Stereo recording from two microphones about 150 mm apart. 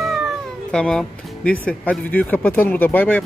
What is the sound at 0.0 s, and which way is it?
Speech, centre (ahead or behind).